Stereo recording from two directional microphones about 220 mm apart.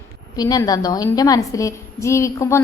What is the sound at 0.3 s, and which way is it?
A woman's voice, 15° left (ahead or behind).